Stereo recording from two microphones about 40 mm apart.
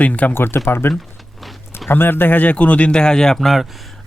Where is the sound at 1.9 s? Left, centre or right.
Left.